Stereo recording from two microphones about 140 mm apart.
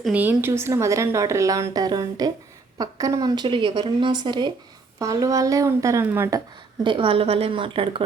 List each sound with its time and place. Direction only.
0.1 s a woman's voice: 15° right (ahead or behind)
6.8 s speech: 35° right (ahead or behind)